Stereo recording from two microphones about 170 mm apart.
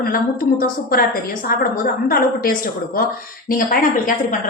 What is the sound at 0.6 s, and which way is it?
A woman's voice, 55° left (ahead or behind).